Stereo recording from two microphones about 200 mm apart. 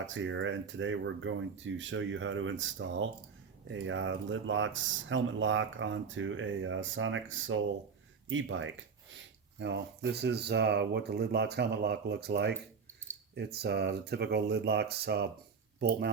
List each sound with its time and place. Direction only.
0.0 s speech: 75° right (ahead or behind)
9.6 s speech: 60° right (ahead or behind)